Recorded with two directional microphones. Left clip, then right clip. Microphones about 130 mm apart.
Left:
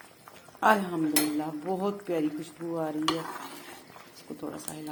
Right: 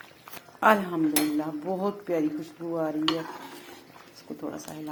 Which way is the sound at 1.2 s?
20° right (ahead or behind).